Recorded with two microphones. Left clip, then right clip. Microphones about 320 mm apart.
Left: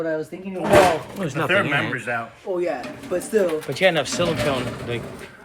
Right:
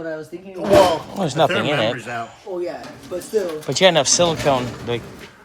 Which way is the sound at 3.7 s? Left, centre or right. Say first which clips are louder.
Right 5 dB; centre.